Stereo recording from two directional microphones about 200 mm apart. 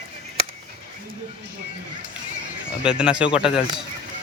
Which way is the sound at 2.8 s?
5° right (ahead or behind).